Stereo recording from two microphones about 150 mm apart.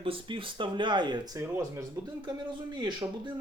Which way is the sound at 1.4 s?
15° right (ahead or behind).